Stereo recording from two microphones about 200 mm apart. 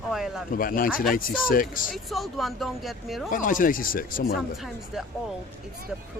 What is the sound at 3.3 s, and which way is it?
Speech, 40° left (ahead or behind).